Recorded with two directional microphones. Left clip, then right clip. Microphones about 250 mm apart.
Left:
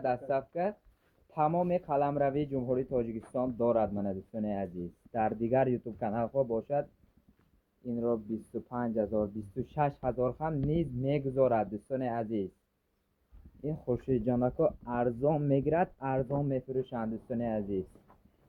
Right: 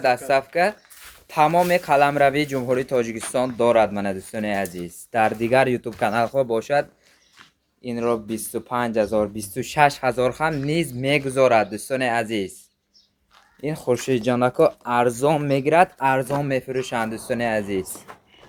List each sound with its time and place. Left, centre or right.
0.0 s speech: centre
7.9 s speech: centre
13.6 s speech: centre